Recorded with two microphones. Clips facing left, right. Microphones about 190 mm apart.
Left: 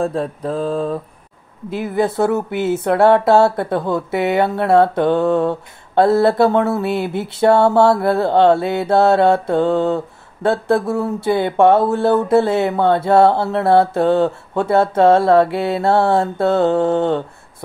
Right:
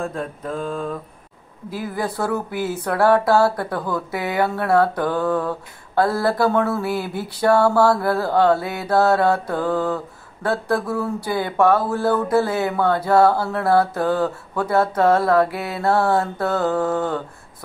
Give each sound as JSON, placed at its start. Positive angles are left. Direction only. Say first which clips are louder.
{"t": 0.0, "sound": "mantra", "louder": "left 7 dB", "side_deg": 35}
{"t": 1.7, "sound": "speech", "louder": "left 7 dB", "side_deg": 25}